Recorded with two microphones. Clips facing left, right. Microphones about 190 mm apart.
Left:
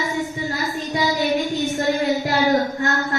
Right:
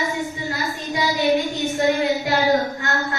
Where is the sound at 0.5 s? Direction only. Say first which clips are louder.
Left 2 dB; centre (ahead or behind).